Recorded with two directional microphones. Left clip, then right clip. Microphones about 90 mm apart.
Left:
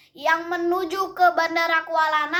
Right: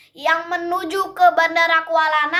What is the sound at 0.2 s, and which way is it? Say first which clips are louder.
A child's voice: right 3 dB; 35° right (ahead or behind).